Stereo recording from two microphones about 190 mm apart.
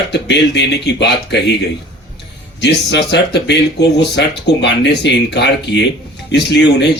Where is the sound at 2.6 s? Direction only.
65° left (ahead or behind).